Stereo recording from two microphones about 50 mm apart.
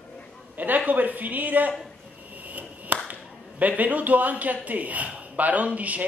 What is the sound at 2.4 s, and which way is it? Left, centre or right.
Speech, right.